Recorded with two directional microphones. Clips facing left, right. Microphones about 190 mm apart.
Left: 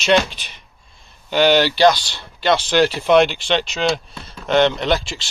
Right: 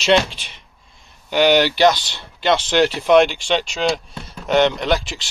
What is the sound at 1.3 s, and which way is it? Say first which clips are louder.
Speech: even; 15° right (ahead or behind).